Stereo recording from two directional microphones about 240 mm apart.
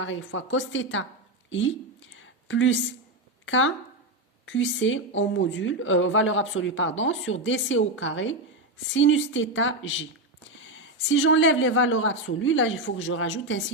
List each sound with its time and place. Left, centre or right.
0.0 s speech: left
2.1 s a sound: left
3.4 s speech: left